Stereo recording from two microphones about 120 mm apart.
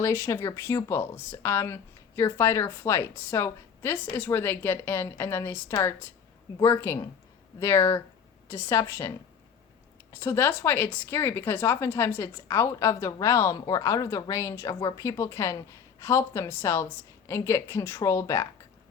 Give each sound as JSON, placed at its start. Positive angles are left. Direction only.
{"t": 0.0, "sound": "speech", "side_deg": 20}